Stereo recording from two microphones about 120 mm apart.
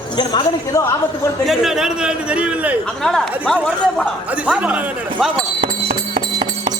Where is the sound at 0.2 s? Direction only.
35° left (ahead or behind).